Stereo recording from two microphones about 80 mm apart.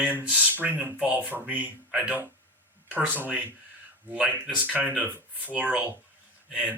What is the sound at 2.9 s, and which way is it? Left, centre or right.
Speech, right.